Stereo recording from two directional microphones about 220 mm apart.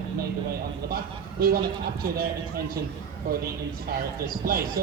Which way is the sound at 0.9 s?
45° right (ahead or behind).